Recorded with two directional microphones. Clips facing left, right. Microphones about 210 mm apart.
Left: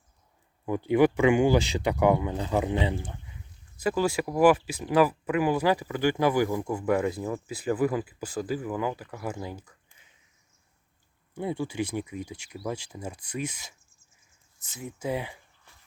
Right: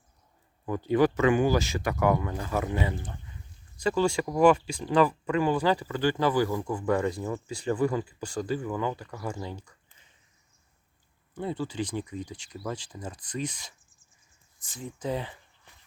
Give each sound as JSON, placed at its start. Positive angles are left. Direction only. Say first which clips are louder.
{"t": 0.9, "sound": "speech", "louder": "left 2 dB", "side_deg": 15}
{"t": 11.3, "sound": "speech", "louder": "left 2 dB", "side_deg": 10}